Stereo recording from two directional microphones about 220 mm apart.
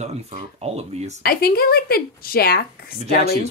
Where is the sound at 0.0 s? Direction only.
30° right (ahead or behind).